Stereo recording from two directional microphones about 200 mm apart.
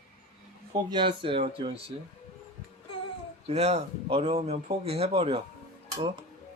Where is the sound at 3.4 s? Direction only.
35° right (ahead or behind).